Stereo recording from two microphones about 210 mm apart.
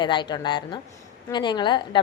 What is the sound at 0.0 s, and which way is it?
A woman's voice, 20° left (ahead or behind).